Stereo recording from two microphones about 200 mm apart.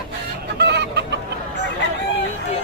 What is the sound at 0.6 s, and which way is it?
Chicken, 60° right (ahead or behind).